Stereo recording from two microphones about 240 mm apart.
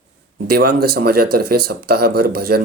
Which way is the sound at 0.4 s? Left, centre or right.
Right.